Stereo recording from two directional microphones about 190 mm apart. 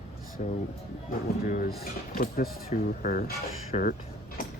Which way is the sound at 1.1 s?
45° left (ahead or behind).